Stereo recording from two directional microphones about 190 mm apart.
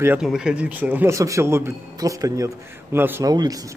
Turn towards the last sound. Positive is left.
turn(degrees=-20)  # may be behind; listen again after turning